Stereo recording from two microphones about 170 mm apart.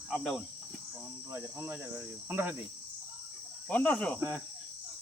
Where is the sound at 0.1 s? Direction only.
Centre (ahead or behind).